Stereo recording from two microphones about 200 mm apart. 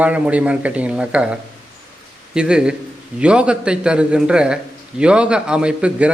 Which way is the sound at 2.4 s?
5° right (ahead or behind).